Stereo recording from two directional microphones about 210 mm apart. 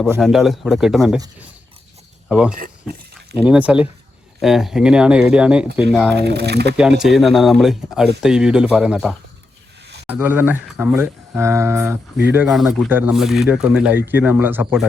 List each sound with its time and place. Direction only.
0.2 s speech: centre (ahead or behind)
2.3 s speech: 5° right (ahead or behind)
6.1 s speech: 50° right (ahead or behind)
6.7 s speech: 5° right (ahead or behind)